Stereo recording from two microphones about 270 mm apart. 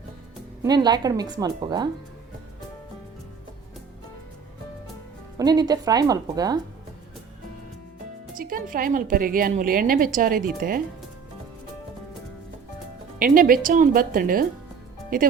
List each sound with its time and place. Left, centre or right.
0.6 s a woman's voice: centre
5.4 s a woman's voice: centre
8.4 s a woman's voice: right
13.1 s a woman's voice: right